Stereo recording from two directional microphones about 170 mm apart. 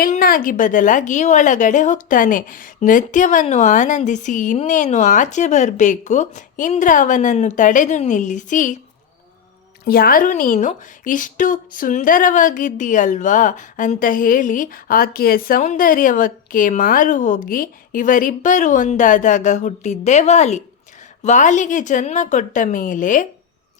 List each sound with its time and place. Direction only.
0.0 s a woman's voice: 55° left (ahead or behind)
9.8 s a woman's voice: 60° left (ahead or behind)